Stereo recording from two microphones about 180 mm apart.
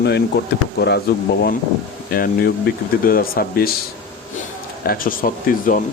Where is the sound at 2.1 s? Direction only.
55° left (ahead or behind).